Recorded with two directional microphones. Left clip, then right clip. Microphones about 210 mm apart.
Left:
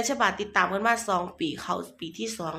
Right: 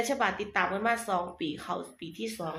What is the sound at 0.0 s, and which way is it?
Speech, 25° left (ahead or behind).